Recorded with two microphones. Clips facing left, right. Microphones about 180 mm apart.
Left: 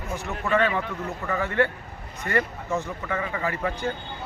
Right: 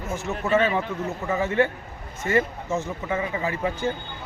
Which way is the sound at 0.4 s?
25° right (ahead or behind).